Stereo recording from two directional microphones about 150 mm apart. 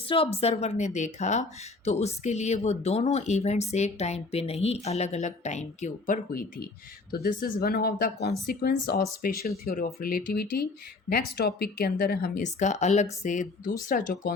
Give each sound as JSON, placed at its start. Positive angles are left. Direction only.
{"t": 0.1, "sound": "speech", "side_deg": 40}
{"t": 7.1, "sound": "speech", "side_deg": 80}
{"t": 12.4, "sound": "speech", "side_deg": 50}
{"t": 13.8, "sound": "speech", "side_deg": 80}